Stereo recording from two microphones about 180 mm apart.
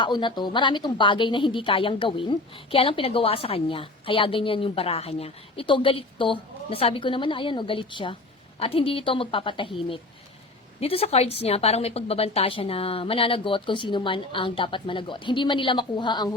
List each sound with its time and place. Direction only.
0.0 s a woman's voice: 25° left (ahead or behind)